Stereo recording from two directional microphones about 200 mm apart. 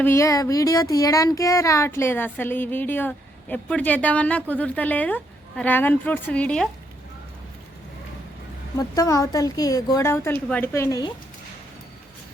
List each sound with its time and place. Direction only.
0.0 s speech: 15° left (ahead or behind)
9.0 s speech: 15° left (ahead or behind)